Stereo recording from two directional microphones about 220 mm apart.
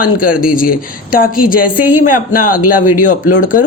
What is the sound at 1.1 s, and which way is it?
Speech, 40° left (ahead or behind).